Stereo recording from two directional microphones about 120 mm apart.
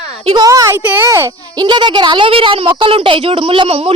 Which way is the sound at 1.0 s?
25° right (ahead or behind).